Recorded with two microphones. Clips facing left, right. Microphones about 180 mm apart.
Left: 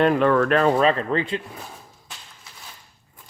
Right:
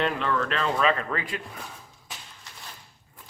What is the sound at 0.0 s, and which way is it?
Speech, 50° left (ahead or behind).